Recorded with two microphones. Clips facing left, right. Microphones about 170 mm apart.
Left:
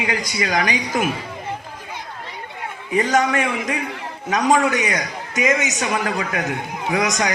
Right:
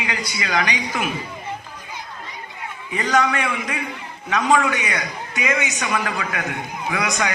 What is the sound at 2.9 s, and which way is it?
A man's voice, 40° left (ahead or behind).